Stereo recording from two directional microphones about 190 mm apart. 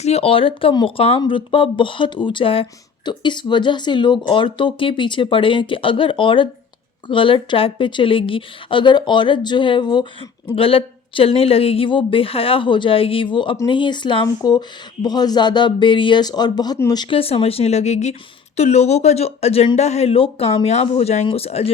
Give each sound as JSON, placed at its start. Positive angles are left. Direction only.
{"t": 0.0, "sound": "speech", "side_deg": 30}